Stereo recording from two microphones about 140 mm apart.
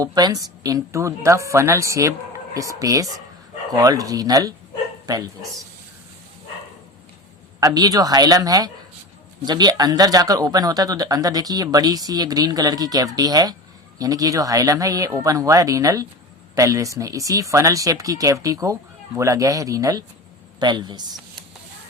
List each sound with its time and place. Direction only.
0.0 s speech: 30° right (ahead or behind)
7.6 s speech: 25° right (ahead or behind)